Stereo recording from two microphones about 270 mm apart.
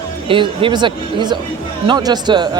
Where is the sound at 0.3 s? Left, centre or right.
Centre.